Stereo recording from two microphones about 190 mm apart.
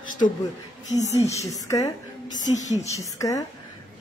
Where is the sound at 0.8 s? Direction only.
40° left (ahead or behind).